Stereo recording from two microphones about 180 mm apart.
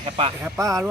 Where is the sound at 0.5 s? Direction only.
15° right (ahead or behind).